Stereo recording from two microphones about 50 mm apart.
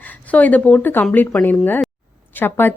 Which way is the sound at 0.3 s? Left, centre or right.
Left.